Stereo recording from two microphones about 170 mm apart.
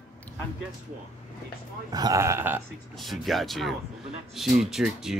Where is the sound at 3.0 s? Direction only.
Centre (ahead or behind).